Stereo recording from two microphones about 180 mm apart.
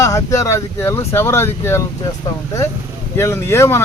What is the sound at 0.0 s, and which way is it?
Speech, 15° left (ahead or behind).